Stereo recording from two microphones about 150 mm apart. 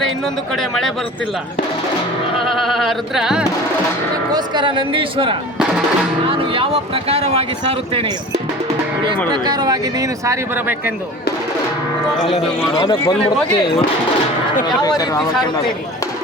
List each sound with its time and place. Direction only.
0.5 s speech: centre (ahead or behind)
2.5 s speech: centre (ahead or behind)
4.3 s speech: 30° right (ahead or behind)
9.3 s speech: 30° right (ahead or behind)
12.2 s a man's voice: 35° left (ahead or behind)
14.8 s speech: 25° left (ahead or behind)